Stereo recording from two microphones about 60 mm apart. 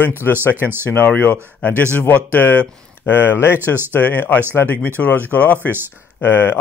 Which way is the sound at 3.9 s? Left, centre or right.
Left.